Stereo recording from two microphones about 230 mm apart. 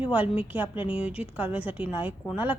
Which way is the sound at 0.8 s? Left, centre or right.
Left.